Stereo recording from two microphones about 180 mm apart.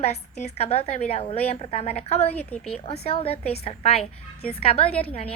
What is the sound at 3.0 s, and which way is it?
A woman's voice, 30° left (ahead or behind).